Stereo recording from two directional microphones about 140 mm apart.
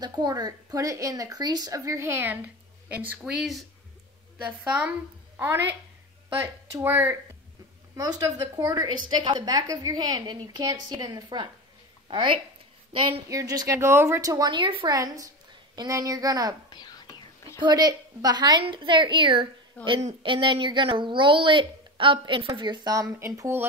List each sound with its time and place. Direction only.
0.0 s a woman's voice: 30° right (ahead or behind)
13.3 s a woman's voice: 25° right (ahead or behind)
15.0 s a woman's voice: 25° right (ahead or behind)
16.7 s whispering: 30° left (ahead or behind)
17.6 s a woman's voice: 30° right (ahead or behind)